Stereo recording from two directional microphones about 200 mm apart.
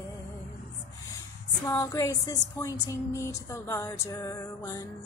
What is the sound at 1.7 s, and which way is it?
Music, 15° left (ahead or behind).